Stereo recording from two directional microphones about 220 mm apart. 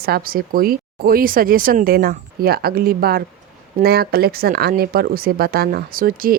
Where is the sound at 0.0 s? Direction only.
45° right (ahead or behind).